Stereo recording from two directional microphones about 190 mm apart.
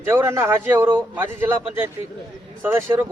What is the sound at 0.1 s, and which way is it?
A man's voice, 15° right (ahead or behind).